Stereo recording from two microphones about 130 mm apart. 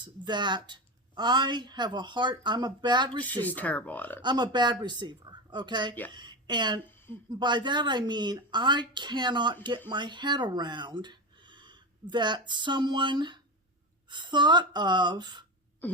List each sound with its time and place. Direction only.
0.0 s a woman's voice: 35° right (ahead or behind)
3.4 s speech: 10° left (ahead or behind)
4.2 s a woman's voice: 35° right (ahead or behind)
15.8 s throat clearing: 15° left (ahead or behind)